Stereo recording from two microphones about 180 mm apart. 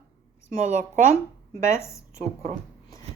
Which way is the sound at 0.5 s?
40° right (ahead or behind).